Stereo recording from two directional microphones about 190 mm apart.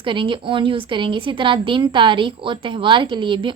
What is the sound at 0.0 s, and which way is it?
A woman's voice, 25° right (ahead or behind).